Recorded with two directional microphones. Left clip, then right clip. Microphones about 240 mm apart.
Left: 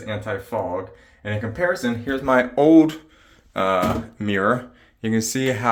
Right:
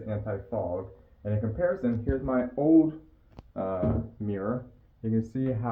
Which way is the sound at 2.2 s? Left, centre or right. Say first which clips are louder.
Left 13 dB; centre.